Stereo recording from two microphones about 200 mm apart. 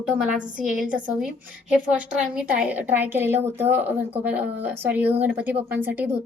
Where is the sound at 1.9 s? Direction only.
5° right (ahead or behind).